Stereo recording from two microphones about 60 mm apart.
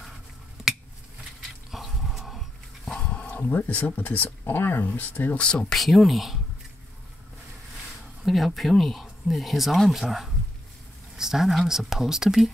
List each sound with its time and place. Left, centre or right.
1.7 s dog: centre
3.1 s speech: left
5.4 s speech: centre
5.7 s speech: centre
8.2 s speech: centre